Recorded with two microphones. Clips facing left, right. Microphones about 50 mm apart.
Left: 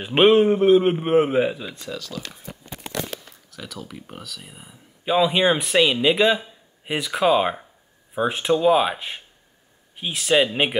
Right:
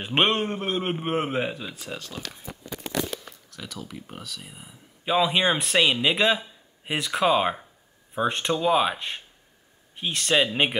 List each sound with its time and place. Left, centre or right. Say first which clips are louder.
0.0 s speech: left 8 dB; centre
1.9 s speech: left 6 dB; right
3.5 s speech: left 2 dB; centre